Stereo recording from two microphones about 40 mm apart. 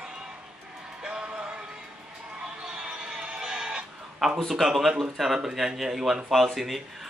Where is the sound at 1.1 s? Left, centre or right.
Right.